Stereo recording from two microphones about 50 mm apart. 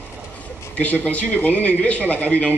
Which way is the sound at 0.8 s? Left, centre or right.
Left.